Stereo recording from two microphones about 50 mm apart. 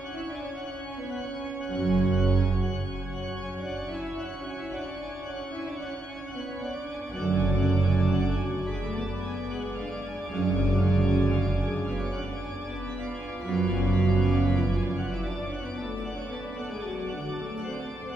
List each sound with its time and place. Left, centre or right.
1.7 s organ: centre
7.2 s organ: centre
7.7 s music: centre
10.3 s music: centre
11.7 s music: centre
13.5 s organ: centre